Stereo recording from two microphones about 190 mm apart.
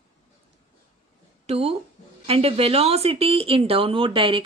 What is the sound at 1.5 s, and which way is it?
A woman's voice, 30° right (ahead or behind).